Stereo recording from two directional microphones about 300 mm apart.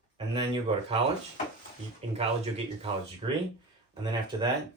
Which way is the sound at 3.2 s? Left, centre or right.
Centre.